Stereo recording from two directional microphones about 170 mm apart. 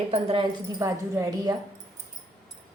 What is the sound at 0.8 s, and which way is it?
Speech, 15° right (ahead or behind).